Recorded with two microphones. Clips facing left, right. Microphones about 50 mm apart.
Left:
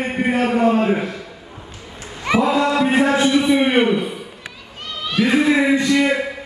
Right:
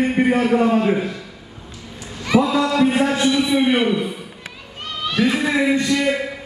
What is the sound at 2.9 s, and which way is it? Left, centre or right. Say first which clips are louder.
A man's voice: left 2 dB; left.